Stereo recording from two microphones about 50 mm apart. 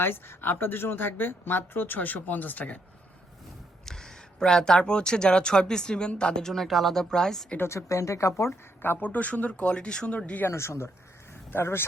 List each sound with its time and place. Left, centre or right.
0.0 s speech: left
3.8 s speech: centre
7.7 s speech: left
9.0 s speech: left
10.5 s speech: left